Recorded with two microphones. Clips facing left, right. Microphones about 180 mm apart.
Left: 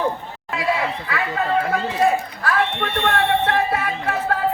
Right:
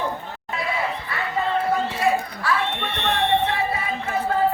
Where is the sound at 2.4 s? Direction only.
55° left (ahead or behind).